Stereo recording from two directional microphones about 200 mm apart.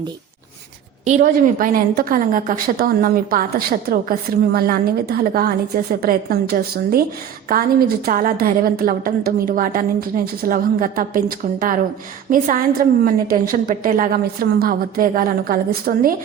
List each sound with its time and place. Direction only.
1.0 s a woman's voice: 40° right (ahead or behind)